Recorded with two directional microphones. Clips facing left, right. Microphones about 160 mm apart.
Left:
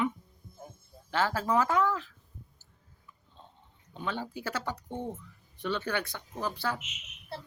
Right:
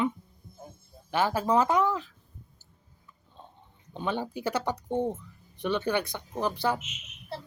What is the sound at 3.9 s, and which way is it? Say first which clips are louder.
Speech: right 4 dB; 20° right (ahead or behind).